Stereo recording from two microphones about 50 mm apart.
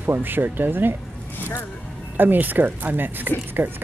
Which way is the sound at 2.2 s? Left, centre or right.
Right.